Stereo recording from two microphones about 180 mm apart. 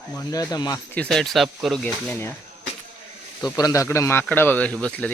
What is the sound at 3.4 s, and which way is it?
A man's voice, 20° left (ahead or behind).